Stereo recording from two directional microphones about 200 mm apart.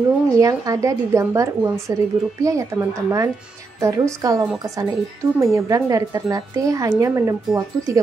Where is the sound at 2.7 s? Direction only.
15° right (ahead or behind).